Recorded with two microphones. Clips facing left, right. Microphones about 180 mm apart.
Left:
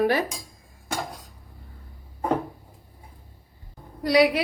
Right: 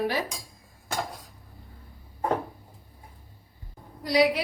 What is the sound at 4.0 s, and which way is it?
Speech, 65° left (ahead or behind).